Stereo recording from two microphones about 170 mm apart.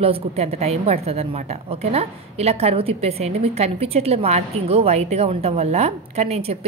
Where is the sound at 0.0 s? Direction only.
35° right (ahead or behind).